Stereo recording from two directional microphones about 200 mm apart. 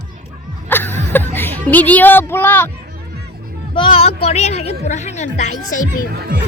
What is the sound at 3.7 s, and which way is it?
A woman's voice, 25° left (ahead or behind).